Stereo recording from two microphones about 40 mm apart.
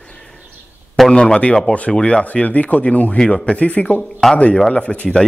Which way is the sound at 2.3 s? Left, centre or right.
Left.